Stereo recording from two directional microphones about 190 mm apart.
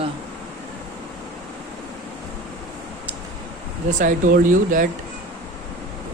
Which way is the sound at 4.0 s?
45° right (ahead or behind).